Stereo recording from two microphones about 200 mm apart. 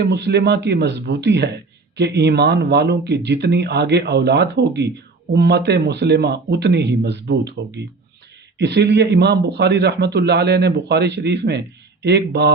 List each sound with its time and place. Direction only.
0.0 s a man's voice: 55° right (ahead or behind)
8.5 s a man's voice: 60° right (ahead or behind)